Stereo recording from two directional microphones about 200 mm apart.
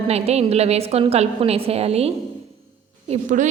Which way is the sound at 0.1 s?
30° right (ahead or behind).